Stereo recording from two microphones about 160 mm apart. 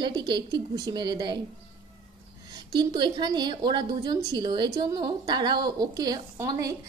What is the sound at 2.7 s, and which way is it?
A woman's voice, 25° right (ahead or behind).